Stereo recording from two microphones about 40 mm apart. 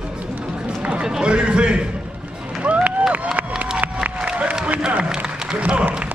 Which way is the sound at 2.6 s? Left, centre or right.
Right.